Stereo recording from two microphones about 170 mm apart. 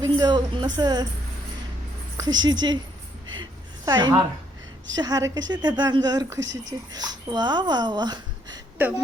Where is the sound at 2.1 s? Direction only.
25° right (ahead or behind).